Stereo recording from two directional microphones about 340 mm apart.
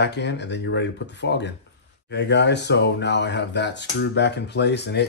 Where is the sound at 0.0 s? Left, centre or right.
Left.